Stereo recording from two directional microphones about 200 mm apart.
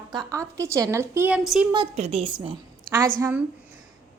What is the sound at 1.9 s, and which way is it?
Speech, 30° right (ahead or behind).